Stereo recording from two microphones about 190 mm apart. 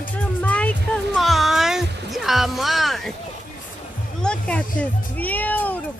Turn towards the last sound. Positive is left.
turn(degrees=10)  # may be behind; listen again after turning